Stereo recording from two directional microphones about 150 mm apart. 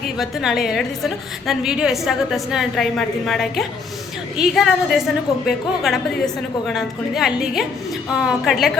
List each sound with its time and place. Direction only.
0.2 s a woman's voice: centre (ahead or behind)